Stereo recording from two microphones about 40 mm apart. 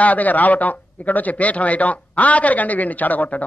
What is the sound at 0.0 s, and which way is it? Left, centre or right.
Speech, left.